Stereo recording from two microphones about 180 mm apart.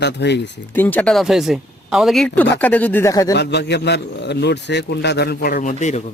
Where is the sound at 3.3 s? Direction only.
70° left (ahead or behind); by 6.0 s 45° left (ahead or behind).